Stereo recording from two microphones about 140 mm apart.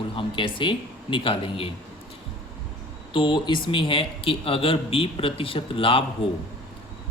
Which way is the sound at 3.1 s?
35° left (ahead or behind).